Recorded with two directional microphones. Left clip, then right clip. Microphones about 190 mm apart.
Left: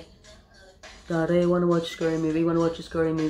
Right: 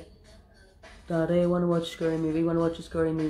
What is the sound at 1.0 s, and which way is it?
Speech, centre (ahead or behind).